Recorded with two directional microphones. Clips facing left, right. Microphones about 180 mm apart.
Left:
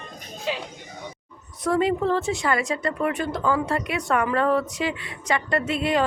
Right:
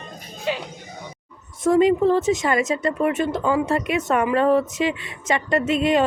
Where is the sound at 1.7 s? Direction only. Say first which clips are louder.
Right 5 dB; 20° right (ahead or behind).